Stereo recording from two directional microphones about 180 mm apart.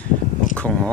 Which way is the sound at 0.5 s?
5° left (ahead or behind).